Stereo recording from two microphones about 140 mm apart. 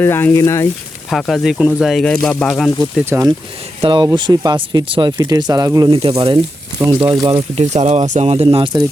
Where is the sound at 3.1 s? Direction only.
20° right (ahead or behind).